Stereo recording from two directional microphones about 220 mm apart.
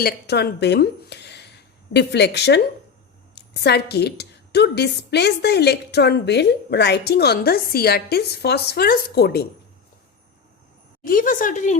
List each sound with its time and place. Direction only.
0.0 s a woman's voice: 50° left (ahead or behind)
11.0 s speech: 40° left (ahead or behind)